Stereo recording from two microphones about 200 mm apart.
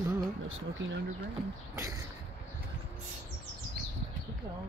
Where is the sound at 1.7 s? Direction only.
15° right (ahead or behind).